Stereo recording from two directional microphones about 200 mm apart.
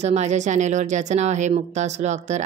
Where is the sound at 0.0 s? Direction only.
35° right (ahead or behind).